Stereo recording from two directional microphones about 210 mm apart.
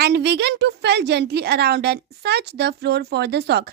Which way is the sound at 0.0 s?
55° right (ahead or behind).